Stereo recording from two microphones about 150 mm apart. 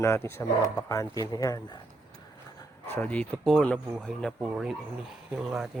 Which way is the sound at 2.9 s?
10° left (ahead or behind).